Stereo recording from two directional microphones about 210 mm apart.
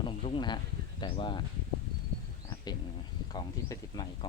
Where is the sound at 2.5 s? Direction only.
20° left (ahead or behind).